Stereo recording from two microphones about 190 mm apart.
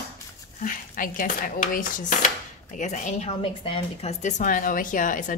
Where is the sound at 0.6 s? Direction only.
45° left (ahead or behind).